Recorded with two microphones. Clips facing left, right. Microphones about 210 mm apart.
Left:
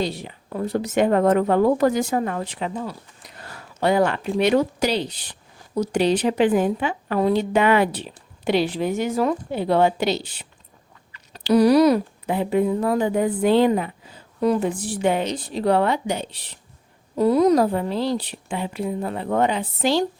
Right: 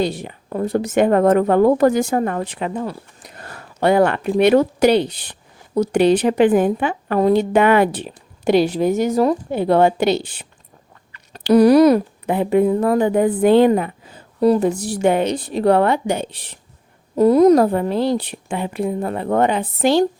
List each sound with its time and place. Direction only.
0.0 s a woman's voice: 50° right (ahead or behind)
14.4 s a woman's voice: 40° right (ahead or behind); by 20.1 s 55° right (ahead or behind)